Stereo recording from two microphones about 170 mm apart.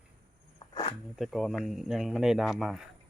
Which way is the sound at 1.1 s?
Centre (ahead or behind).